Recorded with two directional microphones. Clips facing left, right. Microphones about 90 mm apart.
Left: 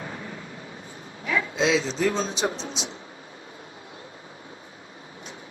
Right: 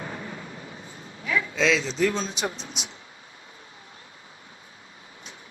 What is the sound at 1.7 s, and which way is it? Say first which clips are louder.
Speech: left 2 dB; 30° left (ahead or behind).